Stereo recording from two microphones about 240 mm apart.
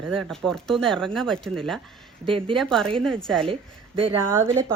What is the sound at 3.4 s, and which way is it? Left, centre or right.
Speech, right.